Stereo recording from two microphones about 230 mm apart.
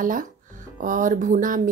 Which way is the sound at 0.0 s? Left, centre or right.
Right.